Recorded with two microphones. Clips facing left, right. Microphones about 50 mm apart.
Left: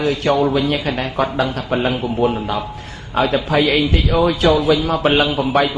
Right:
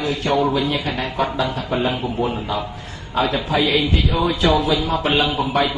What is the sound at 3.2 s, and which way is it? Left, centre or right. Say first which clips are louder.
A man's voice: left 4 dB; left.